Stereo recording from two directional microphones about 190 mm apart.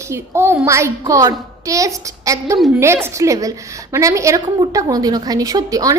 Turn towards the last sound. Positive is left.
turn(degrees=-20)  # may be behind; listen again after turning